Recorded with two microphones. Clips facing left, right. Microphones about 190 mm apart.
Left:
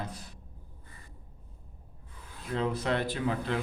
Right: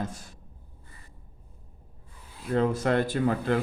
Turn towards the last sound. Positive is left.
turn(degrees=-50)  # may be behind; listen again after turning